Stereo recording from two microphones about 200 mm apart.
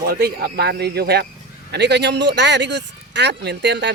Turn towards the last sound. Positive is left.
turn(degrees=-60)  # may be behind; listen again after turning